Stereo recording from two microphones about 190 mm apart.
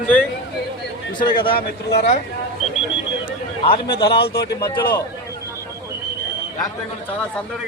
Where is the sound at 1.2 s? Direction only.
25° left (ahead or behind).